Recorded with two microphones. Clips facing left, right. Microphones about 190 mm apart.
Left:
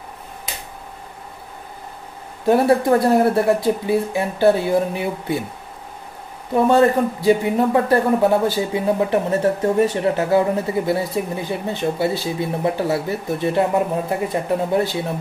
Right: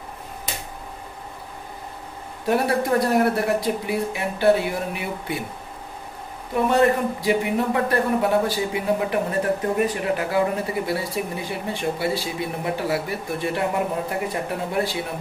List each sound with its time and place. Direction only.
2.4 s speech: 25° left (ahead or behind)
6.5 s speech: 30° left (ahead or behind)